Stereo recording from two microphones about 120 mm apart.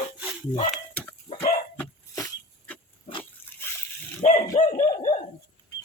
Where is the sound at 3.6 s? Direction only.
20° left (ahead or behind).